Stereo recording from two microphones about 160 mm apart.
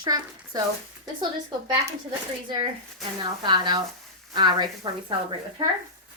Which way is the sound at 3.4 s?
25° right (ahead or behind).